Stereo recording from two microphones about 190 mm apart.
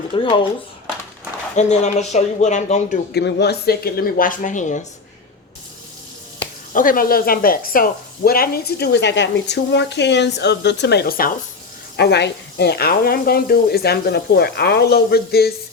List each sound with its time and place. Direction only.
0.1 s speech: 25° left (ahead or behind)
1.5 s speech: 35° left (ahead or behind)
3.1 s speech: 60° left (ahead or behind); by 4.8 s 40° left (ahead or behind)
6.7 s speech: 45° left (ahead or behind)